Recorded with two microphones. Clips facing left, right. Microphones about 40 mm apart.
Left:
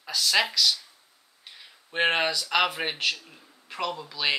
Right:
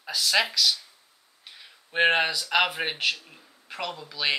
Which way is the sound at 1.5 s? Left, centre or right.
Centre.